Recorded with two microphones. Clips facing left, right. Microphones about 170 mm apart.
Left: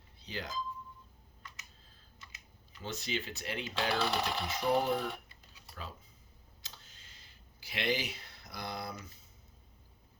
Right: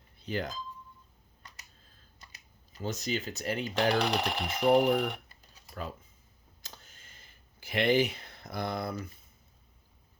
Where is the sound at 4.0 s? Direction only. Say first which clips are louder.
Right 3 dB; 15° right (ahead or behind).